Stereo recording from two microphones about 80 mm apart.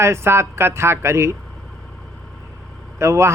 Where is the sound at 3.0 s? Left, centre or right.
Right.